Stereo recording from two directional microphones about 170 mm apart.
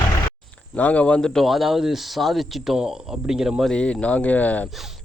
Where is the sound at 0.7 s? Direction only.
10° left (ahead or behind).